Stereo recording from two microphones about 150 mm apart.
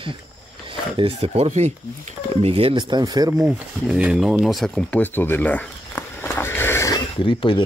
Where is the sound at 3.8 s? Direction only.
5° right (ahead or behind); by 6.0 s 10° left (ahead or behind).